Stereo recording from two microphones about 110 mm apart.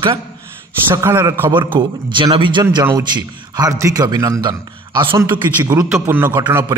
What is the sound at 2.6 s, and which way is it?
A man's voice, 35° right (ahead or behind).